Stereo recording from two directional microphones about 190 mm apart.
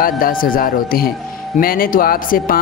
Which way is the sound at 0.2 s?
50° left (ahead or behind).